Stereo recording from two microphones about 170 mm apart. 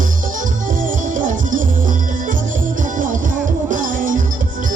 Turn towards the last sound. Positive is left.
turn(degrees=-50)  # may be behind; listen again after turning